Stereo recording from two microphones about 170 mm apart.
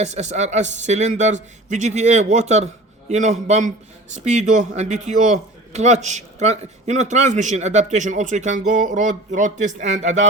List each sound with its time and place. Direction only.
0.0 s a man's voice: 40° right (ahead or behind)